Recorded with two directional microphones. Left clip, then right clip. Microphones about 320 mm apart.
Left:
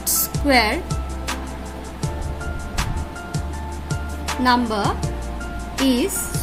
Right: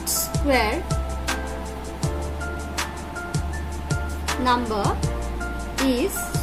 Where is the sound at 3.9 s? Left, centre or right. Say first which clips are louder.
Right 1 dB; centre.